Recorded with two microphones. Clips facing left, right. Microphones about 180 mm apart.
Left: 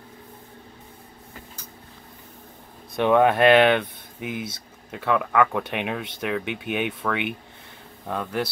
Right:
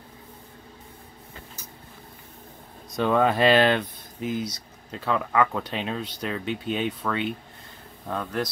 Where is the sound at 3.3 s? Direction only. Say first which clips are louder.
Left 3 dB; 60° left (ahead or behind).